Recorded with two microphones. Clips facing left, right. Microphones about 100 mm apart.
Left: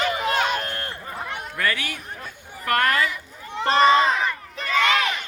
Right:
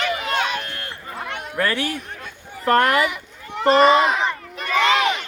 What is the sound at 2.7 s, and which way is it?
Speech, 20° right (ahead or behind).